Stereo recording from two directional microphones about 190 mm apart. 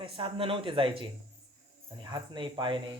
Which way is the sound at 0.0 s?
30° right (ahead or behind).